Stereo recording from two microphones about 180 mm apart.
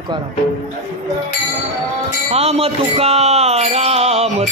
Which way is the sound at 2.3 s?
35° right (ahead or behind).